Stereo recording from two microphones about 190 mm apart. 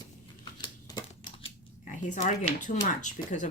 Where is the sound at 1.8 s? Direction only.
40° left (ahead or behind).